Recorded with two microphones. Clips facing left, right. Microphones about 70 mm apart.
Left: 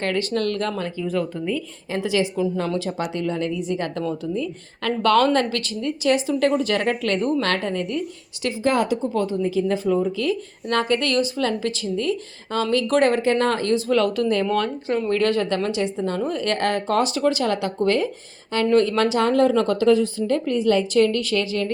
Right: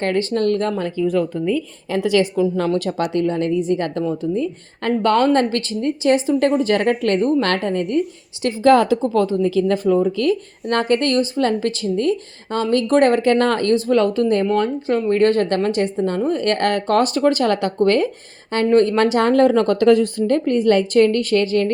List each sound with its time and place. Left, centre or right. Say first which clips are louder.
0.0 s a woman's voice: right 4 dB; right
2.0 s a woman's voice: right 5 dB; right
6.6 s a woman's voice: right 5 dB; right
7.4 s speech: right 4 dB; right
8.6 s speech: right 8 dB; right
11.0 s a woman's voice: right 4 dB; right
13.7 s a woman's voice: right 3 dB; right
14.4 s speech: right 4 dB; centre
15.1 s a woman's voice: right 5 dB; right
16.4 s speech: right 4 dB; right
18.7 s speech: right 4 dB; right